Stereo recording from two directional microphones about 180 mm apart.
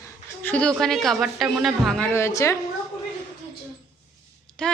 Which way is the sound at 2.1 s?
15° left (ahead or behind).